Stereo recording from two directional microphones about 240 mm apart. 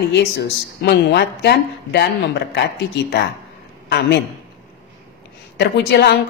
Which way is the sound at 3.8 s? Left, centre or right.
Left.